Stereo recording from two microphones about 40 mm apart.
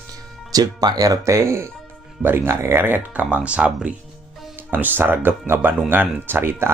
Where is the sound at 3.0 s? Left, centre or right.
Right.